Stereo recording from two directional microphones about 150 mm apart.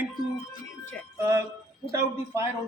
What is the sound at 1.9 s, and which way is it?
Speech, 15° right (ahead or behind).